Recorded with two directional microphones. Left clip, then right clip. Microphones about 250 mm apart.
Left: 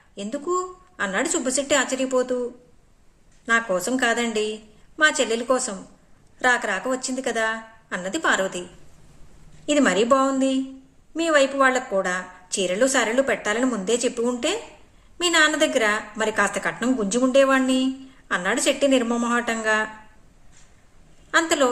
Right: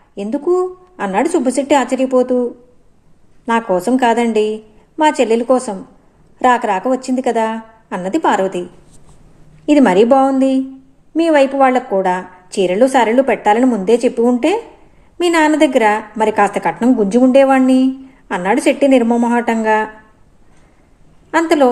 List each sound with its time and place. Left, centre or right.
0.2 s a woman's voice: centre
3.4 s a woman's voice: centre
9.6 s a woman's voice: centre
21.2 s a woman's voice: centre